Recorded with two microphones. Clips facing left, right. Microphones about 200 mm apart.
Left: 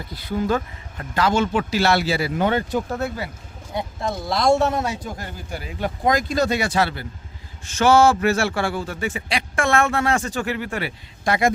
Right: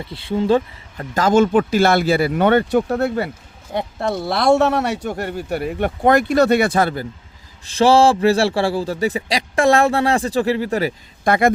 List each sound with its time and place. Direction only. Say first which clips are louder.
0.0 s speech: right 4 dB; 25° right (ahead or behind)
1.1 s speech: right 6 dB; 45° right (ahead or behind)
7.6 s a man's voice: right 3 dB; 35° right (ahead or behind)
11.3 s speech: right 4 dB; 55° right (ahead or behind)